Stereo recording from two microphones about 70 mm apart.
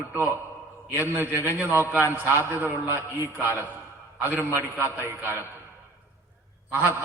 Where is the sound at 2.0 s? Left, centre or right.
Left.